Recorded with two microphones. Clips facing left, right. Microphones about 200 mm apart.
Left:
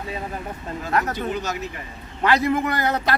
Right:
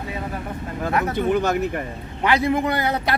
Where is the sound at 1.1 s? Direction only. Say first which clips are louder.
Right 7 dB; 55° right (ahead or behind).